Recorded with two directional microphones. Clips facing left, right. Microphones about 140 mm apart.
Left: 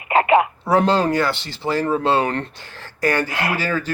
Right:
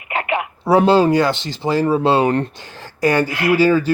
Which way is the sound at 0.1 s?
35° left (ahead or behind).